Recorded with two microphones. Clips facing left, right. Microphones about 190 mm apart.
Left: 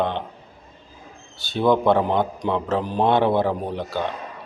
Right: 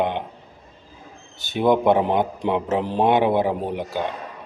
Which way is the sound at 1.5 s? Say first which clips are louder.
Right 1 dB; 15° right (ahead or behind).